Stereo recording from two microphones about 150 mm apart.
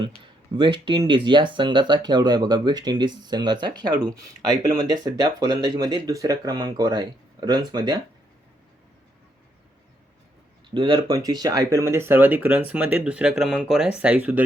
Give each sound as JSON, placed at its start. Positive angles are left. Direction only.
{"t": 0.5, "sound": "speech", "side_deg": -30}
{"t": 10.8, "sound": "speech", "side_deg": -30}